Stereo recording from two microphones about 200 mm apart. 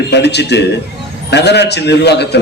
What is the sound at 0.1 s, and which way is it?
A man's voice, 60° left (ahead or behind).